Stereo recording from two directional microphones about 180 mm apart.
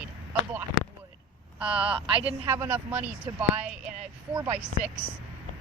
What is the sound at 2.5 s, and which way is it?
Speech, 10° right (ahead or behind).